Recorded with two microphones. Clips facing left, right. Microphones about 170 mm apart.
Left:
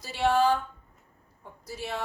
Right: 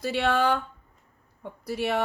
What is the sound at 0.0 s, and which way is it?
Speech, 60° right (ahead or behind).